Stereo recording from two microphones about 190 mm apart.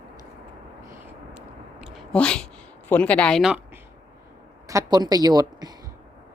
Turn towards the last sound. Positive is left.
turn(degrees=-20)  # may be behind; listen again after turning